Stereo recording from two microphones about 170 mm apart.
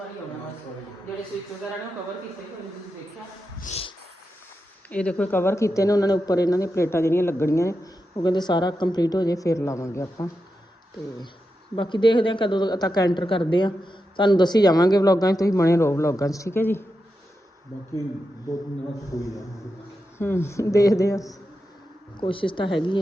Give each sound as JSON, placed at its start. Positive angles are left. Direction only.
{"t": 3.6, "sound": "a sound", "side_deg": 40}
{"t": 4.9, "sound": "speech", "side_deg": 5}
{"t": 11.8, "sound": "a woman's voice", "side_deg": 30}
{"t": 19.1, "sound": "a woman's voice", "side_deg": 20}
{"t": 22.2, "sound": "a woman's voice", "side_deg": 30}